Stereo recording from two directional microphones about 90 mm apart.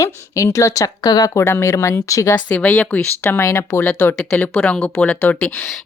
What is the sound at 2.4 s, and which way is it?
Speech, 20° left (ahead or behind).